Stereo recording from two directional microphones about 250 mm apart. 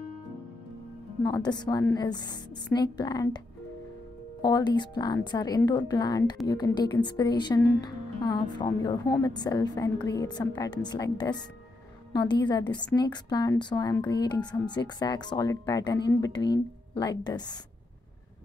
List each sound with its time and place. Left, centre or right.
1.2 s speech: centre
4.4 s speech: centre